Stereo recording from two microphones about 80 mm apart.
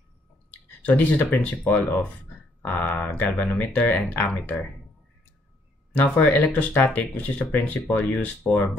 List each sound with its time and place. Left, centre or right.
0.8 s speech: centre
5.9 s speech: centre